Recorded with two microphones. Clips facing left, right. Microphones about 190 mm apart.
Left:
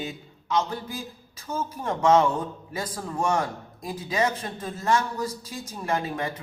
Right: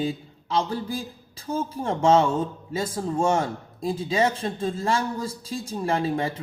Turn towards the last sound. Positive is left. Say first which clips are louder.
# right 3 dB
turn(degrees=-30)  # may be behind; listen again after turning